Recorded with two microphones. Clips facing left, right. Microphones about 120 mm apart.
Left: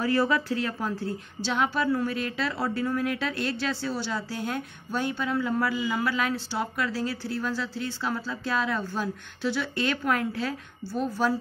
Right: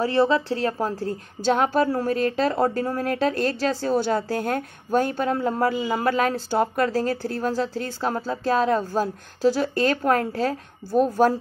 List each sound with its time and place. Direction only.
0.0 s a woman's voice: 25° right (ahead or behind); by 11.3 s 45° right (ahead or behind)